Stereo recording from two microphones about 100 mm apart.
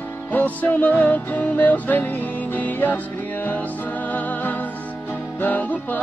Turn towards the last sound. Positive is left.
turn(degrees=15)  # may be behind; listen again after turning